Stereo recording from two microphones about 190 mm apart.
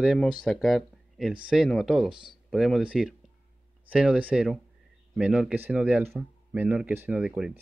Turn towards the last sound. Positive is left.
turn(degrees=-5)  # may be behind; listen again after turning